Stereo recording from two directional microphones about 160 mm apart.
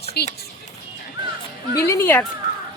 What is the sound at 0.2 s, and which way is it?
Speech, 90° left.